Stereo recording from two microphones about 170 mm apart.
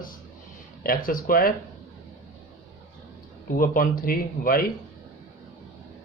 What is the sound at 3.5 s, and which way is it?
Speech, 55° left (ahead or behind).